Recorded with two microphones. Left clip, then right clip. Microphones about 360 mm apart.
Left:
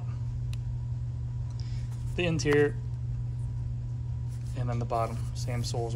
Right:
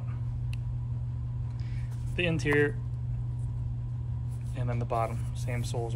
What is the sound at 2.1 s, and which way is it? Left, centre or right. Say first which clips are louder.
Speech: left 1 dB; centre.